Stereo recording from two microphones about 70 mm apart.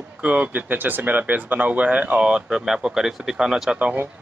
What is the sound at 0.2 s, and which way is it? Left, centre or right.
Speech, centre.